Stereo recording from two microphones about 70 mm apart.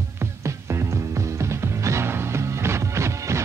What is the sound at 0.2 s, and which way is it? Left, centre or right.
Music, right.